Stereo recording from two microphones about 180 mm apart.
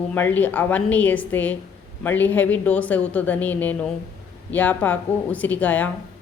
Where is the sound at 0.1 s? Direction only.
10° left (ahead or behind).